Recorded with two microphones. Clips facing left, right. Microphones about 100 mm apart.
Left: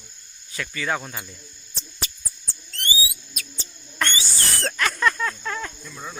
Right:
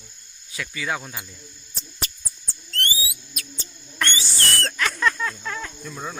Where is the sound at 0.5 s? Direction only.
5° right (ahead or behind).